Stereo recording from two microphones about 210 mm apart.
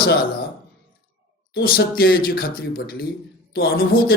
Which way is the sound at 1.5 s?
45° left (ahead or behind).